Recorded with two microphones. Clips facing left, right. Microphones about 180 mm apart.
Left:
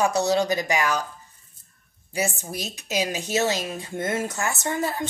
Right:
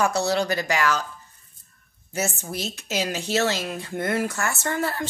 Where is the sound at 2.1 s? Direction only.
15° left (ahead or behind).